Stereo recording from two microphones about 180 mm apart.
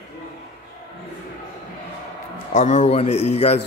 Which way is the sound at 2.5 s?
40° left (ahead or behind).